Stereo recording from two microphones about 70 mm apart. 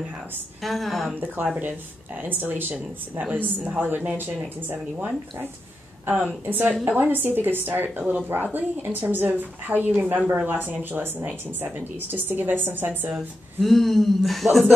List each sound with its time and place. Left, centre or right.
0.6 s speech: centre
1.2 s speech: right
13.6 s speech: centre